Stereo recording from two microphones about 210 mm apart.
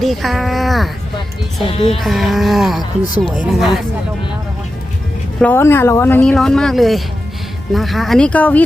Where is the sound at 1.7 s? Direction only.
25° left (ahead or behind).